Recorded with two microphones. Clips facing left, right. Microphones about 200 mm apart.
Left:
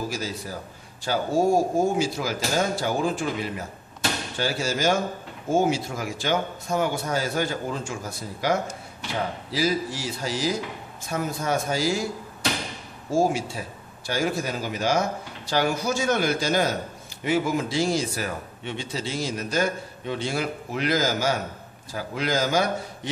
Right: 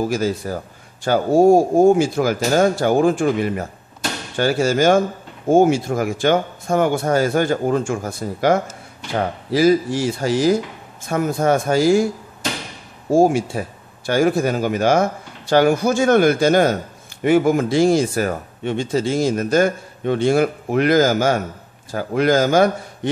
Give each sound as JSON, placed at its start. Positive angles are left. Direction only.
{"t": 0.1, "sound": "a man's voice", "side_deg": -55}
{"t": 13.1, "sound": "a man's voice", "side_deg": -55}